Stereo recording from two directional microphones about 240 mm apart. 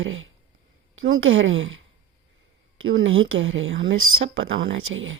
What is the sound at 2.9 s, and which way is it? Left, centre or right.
Speech, right.